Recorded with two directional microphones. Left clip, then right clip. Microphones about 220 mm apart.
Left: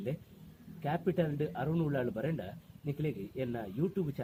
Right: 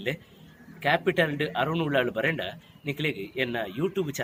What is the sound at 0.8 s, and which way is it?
Speech, 20° right (ahead or behind).